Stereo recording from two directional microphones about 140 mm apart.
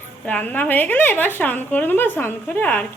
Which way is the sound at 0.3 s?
10° left (ahead or behind).